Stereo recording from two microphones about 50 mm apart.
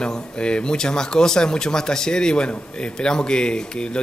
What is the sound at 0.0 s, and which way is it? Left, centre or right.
Speech, centre.